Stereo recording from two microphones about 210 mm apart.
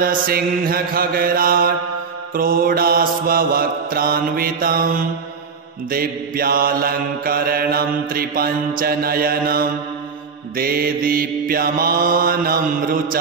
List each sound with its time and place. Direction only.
0.0 s mantra: 45° right (ahead or behind)